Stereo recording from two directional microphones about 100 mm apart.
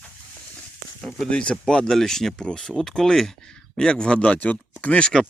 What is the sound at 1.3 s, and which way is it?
Speech, 10° left (ahead or behind).